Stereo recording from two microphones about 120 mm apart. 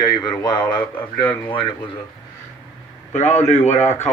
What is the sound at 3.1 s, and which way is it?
Speech, 70° left (ahead or behind).